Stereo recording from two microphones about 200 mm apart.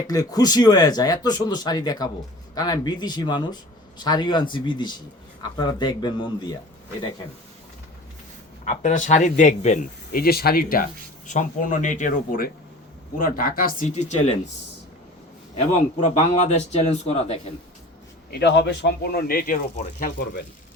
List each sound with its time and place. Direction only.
0.1 s speech: 20° left (ahead or behind)
8.6 s speech: 35° left (ahead or behind)
15.5 s speech: 35° left (ahead or behind)
18.3 s a man's voice: 55° left (ahead or behind)